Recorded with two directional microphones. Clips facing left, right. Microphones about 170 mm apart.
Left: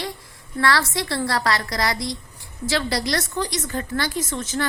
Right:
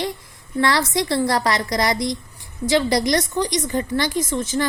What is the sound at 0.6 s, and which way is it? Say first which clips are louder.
A woman's voice: right 2 dB; 20° right (ahead or behind).